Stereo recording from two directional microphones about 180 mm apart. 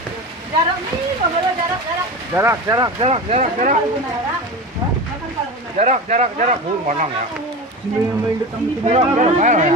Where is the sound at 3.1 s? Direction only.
35° right (ahead or behind).